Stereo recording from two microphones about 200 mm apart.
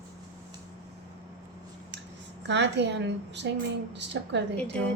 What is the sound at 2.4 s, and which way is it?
A woman's voice, 60° right (ahead or behind).